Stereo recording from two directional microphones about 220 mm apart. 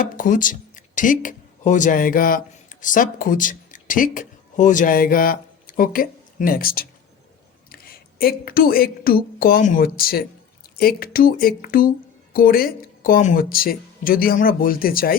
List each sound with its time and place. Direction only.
0.2 s a man's voice: 35° left (ahead or behind)